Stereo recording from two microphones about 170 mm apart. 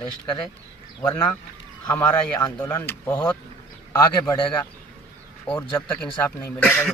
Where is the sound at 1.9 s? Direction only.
20° left (ahead or behind).